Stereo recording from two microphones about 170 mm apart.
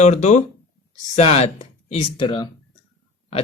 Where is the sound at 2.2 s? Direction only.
25° left (ahead or behind).